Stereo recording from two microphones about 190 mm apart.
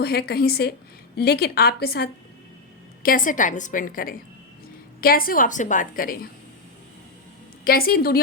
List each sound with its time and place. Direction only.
0.0 s a woman's voice: 55° left (ahead or behind)
7.6 s a woman's voice: 50° left (ahead or behind)